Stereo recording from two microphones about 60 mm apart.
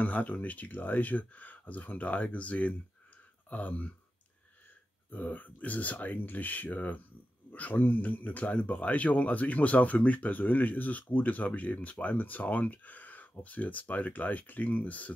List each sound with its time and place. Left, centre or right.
0.0 s a man's voice: left
5.1 s a man's voice: left